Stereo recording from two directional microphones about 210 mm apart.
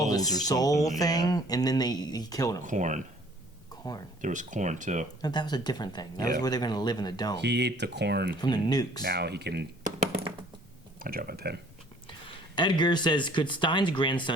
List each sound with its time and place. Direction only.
0.0 s a sound: 15° left (ahead or behind)
0.4 s speech: 15° left (ahead or behind)
2.6 s speech: 35° right (ahead or behind)
4.2 s speech: 35° right (ahead or behind)
5.2 s speech: 20° left (ahead or behind)
7.3 s speech: 55° right (ahead or behind)
8.4 s speech: 20° left (ahead or behind)
9.0 s speech: 50° right (ahead or behind)
11.0 s speech: 45° right (ahead or behind)
12.0 s speech: 25° left (ahead or behind)